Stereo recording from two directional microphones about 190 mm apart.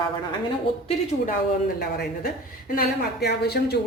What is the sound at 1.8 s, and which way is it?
A woman's voice, 50° left (ahead or behind).